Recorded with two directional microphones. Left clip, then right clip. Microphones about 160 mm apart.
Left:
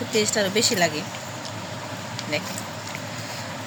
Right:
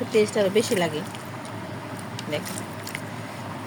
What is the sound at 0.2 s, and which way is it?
Speech, 15° right (ahead or behind).